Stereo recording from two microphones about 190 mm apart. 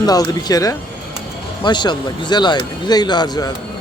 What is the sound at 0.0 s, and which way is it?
Speech, 20° left (ahead or behind).